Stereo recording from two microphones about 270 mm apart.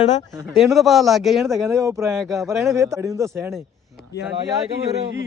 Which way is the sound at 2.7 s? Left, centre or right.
Centre.